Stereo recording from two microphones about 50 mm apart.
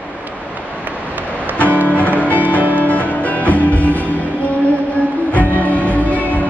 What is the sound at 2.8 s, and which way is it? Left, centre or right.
Music, left.